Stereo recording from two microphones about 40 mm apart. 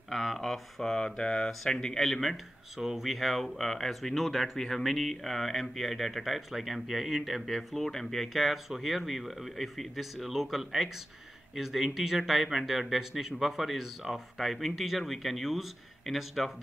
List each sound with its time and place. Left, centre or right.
0.1 s a sound: centre
0.4 s speech: centre
0.9 s speech: left
2.0 s speech: centre
7.4 s speech: centre